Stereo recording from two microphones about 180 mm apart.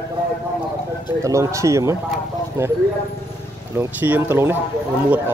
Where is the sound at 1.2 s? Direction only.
15° right (ahead or behind).